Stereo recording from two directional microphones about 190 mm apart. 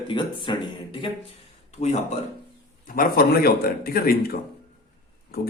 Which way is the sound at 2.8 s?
50° left (ahead or behind).